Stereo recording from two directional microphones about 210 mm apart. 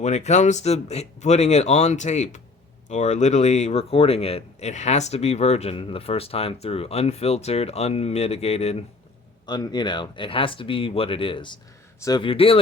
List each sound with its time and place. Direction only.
0.0 s speech: 30° left (ahead or behind)